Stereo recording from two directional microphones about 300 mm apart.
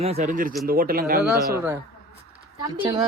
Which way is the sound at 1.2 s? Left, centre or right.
Centre.